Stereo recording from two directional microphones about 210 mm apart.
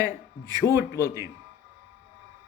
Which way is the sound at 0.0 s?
20° right (ahead or behind).